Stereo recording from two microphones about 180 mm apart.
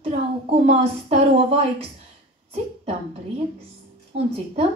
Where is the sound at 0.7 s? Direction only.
35° right (ahead or behind).